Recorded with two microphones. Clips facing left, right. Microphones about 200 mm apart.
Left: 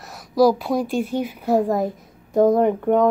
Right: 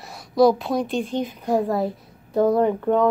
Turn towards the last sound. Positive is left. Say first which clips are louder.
# left 2 dB
turn(degrees=15)  # may be behind; listen again after turning